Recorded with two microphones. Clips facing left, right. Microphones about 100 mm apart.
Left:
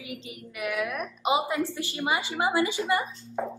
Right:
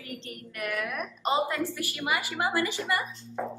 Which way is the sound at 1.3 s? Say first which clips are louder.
Left 1 dB; 20° left (ahead or behind).